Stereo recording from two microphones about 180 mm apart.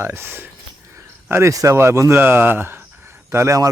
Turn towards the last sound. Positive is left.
turn(degrees=-15)  # may be behind; listen again after turning